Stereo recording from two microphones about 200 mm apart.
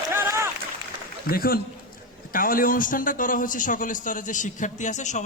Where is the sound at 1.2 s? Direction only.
45° left (ahead or behind).